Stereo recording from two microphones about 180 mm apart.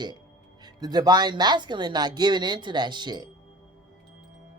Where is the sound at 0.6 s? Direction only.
20° right (ahead or behind).